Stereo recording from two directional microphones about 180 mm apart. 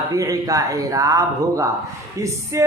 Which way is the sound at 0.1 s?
20° right (ahead or behind).